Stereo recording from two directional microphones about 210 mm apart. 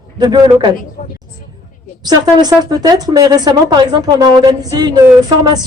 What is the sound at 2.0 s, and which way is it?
A woman's voice, 20° right (ahead or behind).